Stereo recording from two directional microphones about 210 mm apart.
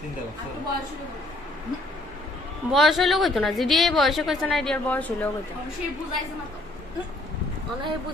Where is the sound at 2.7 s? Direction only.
Centre (ahead or behind).